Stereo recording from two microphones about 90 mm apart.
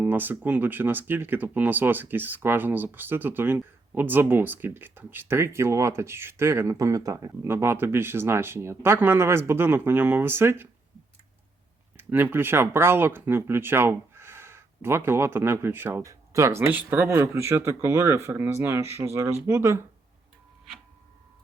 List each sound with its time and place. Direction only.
0.0 s speech: 20° right (ahead or behind)
11.9 s speech: 25° right (ahead or behind)
16.6 s speech: 20° right (ahead or behind)